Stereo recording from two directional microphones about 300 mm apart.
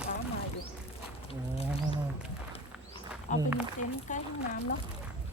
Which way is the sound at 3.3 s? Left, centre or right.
Left.